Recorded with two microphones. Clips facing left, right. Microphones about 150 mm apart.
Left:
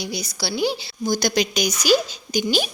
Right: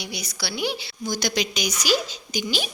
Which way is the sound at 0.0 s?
30° left (ahead or behind).